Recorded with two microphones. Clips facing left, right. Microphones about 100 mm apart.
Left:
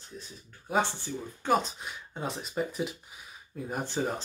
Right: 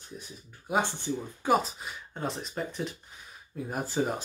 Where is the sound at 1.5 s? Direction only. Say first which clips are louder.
Right 1 dB; centre (ahead or behind).